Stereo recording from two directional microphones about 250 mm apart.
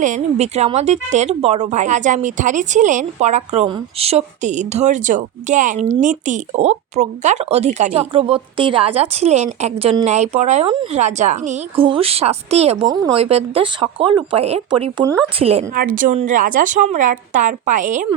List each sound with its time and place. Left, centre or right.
0.0 s speech: right
15.7 s a woman's voice: right